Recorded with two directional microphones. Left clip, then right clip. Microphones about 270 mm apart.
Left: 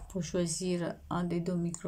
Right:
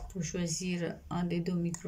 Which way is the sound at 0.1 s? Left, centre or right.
Centre.